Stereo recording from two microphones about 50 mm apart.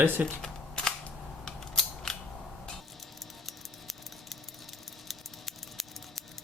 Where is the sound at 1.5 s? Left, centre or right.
Centre.